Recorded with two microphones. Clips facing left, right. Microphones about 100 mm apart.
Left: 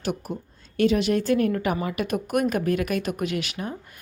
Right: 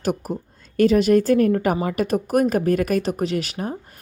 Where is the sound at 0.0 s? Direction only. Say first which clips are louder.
Right 5 dB; 40° right (ahead or behind).